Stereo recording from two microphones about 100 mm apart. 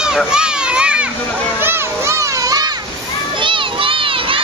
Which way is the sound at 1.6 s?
25° right (ahead or behind).